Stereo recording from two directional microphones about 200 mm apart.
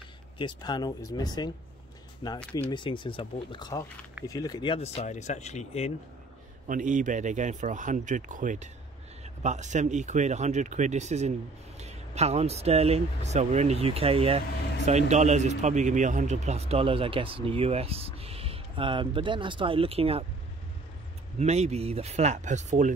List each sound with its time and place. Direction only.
0.4 s speech: 20° left (ahead or behind)
6.7 s a man's voice: 40° right (ahead or behind)
21.4 s speech: 35° right (ahead or behind)